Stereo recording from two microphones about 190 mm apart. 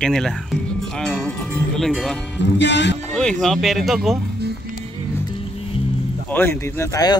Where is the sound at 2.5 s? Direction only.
70° left (ahead or behind).